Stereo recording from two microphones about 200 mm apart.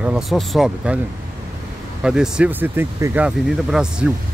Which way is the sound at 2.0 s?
5° right (ahead or behind).